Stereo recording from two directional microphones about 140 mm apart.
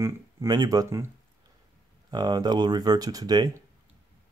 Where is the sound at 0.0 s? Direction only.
25° right (ahead or behind).